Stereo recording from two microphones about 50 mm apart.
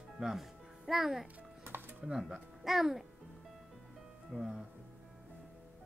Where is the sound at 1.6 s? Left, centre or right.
Right.